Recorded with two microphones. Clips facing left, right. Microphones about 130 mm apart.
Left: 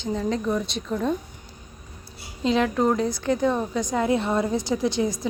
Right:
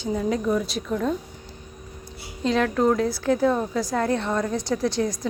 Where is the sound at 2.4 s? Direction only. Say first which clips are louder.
Even; centre (ahead or behind).